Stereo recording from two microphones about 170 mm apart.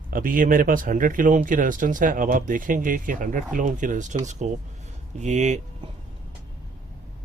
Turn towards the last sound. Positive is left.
turn(degrees=-45)  # may be behind; listen again after turning